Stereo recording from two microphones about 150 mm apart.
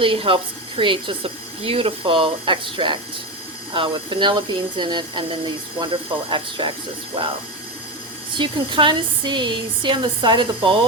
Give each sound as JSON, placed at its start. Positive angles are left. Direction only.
{"t": 0.0, "sound": "speech", "side_deg": -35}
{"t": 8.4, "sound": "speech", "side_deg": -35}